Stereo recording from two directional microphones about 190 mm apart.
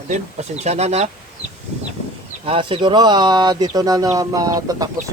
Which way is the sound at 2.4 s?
30° right (ahead or behind).